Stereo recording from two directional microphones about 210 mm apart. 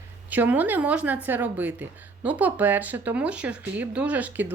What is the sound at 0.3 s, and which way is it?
Speech, 10° right (ahead or behind).